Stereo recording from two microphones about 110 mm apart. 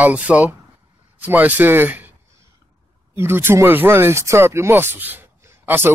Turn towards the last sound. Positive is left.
turn(degrees=-20)  # may be behind; listen again after turning